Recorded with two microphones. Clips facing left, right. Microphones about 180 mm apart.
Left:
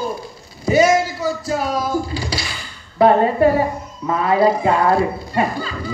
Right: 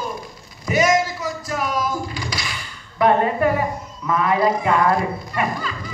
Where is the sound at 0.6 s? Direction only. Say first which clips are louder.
Left 4 dB; 30° left (ahead or behind).